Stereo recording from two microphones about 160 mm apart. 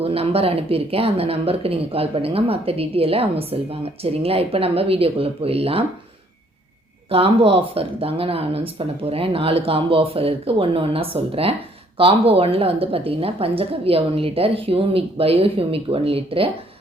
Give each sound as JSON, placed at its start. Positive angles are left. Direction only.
{"t": 0.0, "sound": "speech", "side_deg": -40}
{"t": 7.1, "sound": "speech", "side_deg": -35}